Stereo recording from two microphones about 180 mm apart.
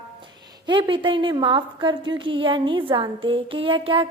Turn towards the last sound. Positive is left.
turn(degrees=-30)  # may be behind; listen again after turning